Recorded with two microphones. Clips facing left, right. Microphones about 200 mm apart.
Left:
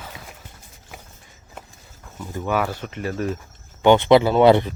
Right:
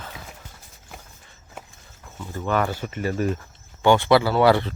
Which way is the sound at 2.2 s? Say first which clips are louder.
Even; 10° left (ahead or behind).